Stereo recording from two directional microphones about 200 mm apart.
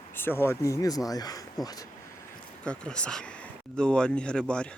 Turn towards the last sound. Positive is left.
turn(degrees=5)  # may be behind; listen again after turning